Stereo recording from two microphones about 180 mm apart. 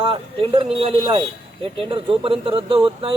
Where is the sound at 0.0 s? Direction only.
30° right (ahead or behind).